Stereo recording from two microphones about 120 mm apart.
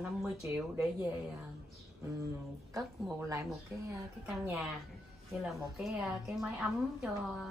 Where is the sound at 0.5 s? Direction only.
20° right (ahead or behind).